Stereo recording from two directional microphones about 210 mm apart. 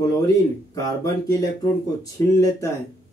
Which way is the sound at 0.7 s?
15° left (ahead or behind).